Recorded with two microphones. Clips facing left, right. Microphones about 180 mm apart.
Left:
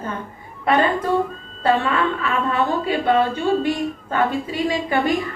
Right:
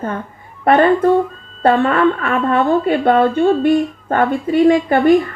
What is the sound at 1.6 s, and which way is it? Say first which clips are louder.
A woman's voice: right 6 dB; 55° right (ahead or behind).